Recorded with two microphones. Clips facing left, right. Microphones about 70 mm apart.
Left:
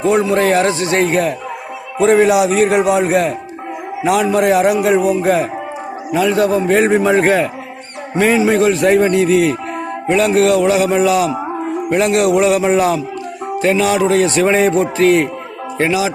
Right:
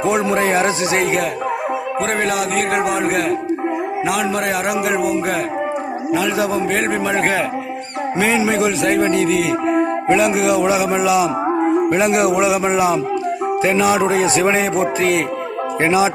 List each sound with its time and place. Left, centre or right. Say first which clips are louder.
0.0 s a man's voice: left 3 dB; right; by 9.6 s centre
9.6 s music: right 4 dB; centre
11.9 s speech: left 2 dB; centre
14.4 s a man's voice: left 3 dB; centre
15.8 s speech: even; right